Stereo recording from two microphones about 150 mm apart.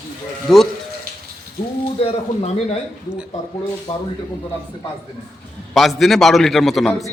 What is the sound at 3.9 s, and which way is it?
Speech, 30° left (ahead or behind).